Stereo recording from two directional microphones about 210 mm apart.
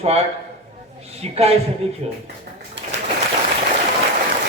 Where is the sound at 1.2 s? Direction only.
30° right (ahead or behind).